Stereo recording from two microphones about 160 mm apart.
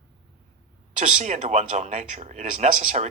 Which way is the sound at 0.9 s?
45° right (ahead or behind).